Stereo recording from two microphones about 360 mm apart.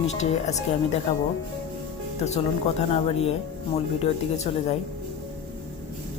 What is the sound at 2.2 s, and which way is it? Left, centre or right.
Speech, centre.